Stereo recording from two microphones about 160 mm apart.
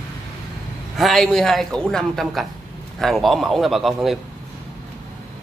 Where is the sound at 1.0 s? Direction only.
Centre (ahead or behind).